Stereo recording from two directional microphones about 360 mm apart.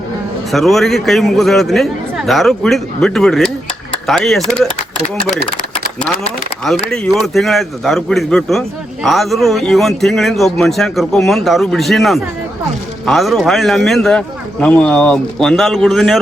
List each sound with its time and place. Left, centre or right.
0.5 s a man's voice: centre
7.2 s a man's voice: centre